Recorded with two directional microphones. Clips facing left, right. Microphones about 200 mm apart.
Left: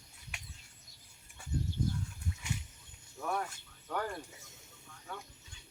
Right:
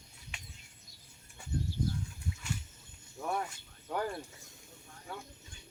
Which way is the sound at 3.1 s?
15° right (ahead or behind).